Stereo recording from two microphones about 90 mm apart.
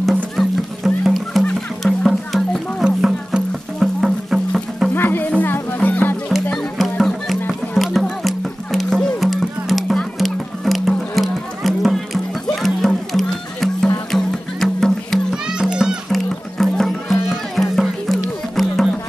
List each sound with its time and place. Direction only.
0.4 s music: centre (ahead or behind)
4.9 s music: 20° left (ahead or behind)
6.5 s music: 5° left (ahead or behind)
15.5 s music: 5° right (ahead or behind)